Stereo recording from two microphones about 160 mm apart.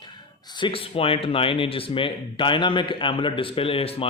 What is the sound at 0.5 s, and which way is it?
Speech, 30° left (ahead or behind).